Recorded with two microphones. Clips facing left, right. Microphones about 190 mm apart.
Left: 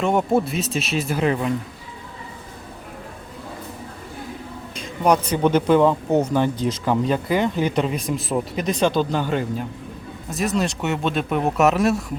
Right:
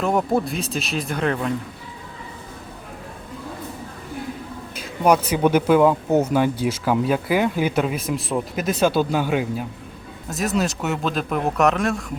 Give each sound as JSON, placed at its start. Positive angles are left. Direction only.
{"t": 0.0, "sound": "speech", "side_deg": 0}
{"t": 4.7, "sound": "speech", "side_deg": -5}